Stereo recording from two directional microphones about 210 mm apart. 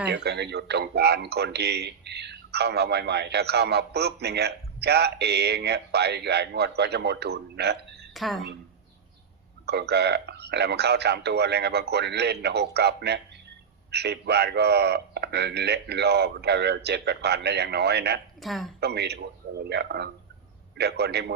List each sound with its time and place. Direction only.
0.1 s speech: 50° right (ahead or behind)
8.1 s a woman's voice: centre (ahead or behind)
9.6 s speech: 50° right (ahead or behind)
18.4 s a woman's voice: centre (ahead or behind)
18.8 s speech: 50° right (ahead or behind)